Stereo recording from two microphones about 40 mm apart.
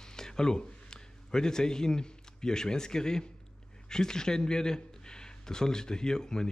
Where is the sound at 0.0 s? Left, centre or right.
Centre.